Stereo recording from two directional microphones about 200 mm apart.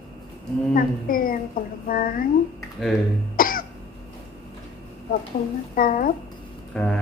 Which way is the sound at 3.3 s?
45° left (ahead or behind).